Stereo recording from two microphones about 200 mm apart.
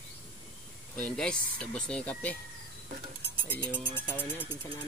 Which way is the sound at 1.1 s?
5° left (ahead or behind).